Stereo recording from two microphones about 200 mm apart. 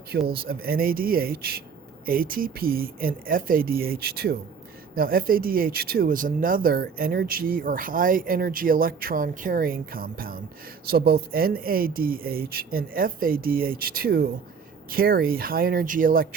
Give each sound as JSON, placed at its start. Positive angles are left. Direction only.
{"t": 0.1, "sound": "speech", "side_deg": -50}